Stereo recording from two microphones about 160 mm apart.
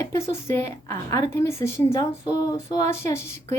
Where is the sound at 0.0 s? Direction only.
15° left (ahead or behind).